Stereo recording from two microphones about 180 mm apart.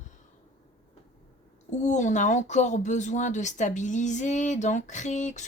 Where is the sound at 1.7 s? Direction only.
40° left (ahead or behind).